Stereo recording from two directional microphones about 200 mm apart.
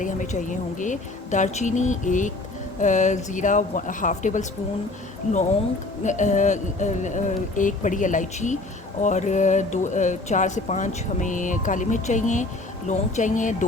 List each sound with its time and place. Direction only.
0.0 s speech: 40° left (ahead or behind)
6.0 s speech: 40° left (ahead or behind)